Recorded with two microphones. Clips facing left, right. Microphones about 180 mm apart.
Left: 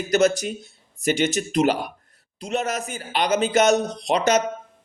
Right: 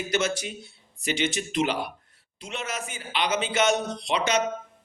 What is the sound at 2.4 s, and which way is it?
Mantra, 40° left (ahead or behind).